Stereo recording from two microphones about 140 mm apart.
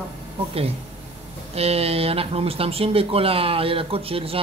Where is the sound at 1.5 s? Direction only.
45° right (ahead or behind).